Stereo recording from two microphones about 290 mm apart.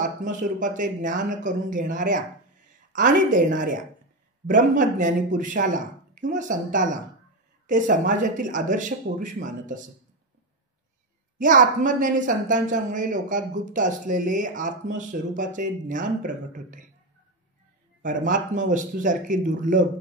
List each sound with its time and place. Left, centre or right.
0.0 s a woman's voice: right
11.3 s a woman's voice: right
18.0 s a woman's voice: right